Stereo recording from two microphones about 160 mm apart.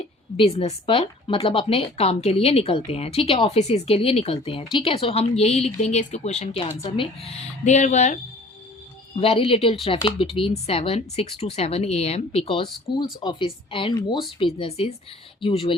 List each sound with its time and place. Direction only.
0.3 s a woman's voice: 40° left (ahead or behind)
9.1 s a woman's voice: 40° left (ahead or behind)